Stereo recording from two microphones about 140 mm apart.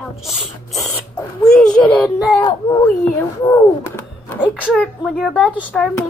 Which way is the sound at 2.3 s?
30° left (ahead or behind).